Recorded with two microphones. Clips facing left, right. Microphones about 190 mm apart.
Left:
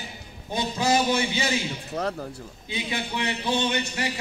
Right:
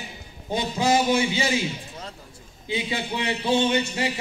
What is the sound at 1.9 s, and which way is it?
Speech, 70° left (ahead or behind).